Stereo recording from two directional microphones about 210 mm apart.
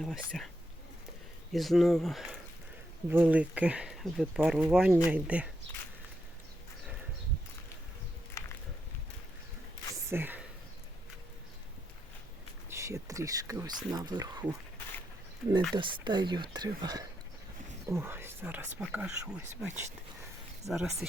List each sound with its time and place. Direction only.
0.3 s speech: 5° left (ahead or behind)
1.5 s speech: centre (ahead or behind)
8.4 s a sound: 15° left (ahead or behind)
10.1 s speech: 10° right (ahead or behind)
12.7 s speech: 15° right (ahead or behind)
15.7 s speech: 20° right (ahead or behind); by 21.1 s centre (ahead or behind)